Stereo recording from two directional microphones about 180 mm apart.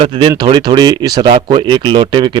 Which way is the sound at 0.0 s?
25° right (ahead or behind).